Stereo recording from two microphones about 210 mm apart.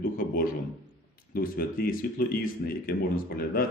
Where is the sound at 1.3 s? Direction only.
45° left (ahead or behind).